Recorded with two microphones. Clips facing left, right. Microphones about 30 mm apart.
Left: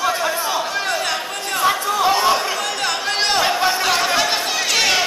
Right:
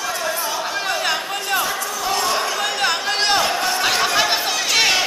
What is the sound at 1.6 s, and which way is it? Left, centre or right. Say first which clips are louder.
Chatter: left 7 dB; left.